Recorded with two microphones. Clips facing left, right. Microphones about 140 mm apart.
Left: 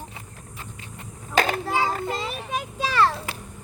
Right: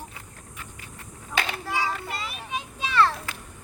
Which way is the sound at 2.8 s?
35° left (ahead or behind).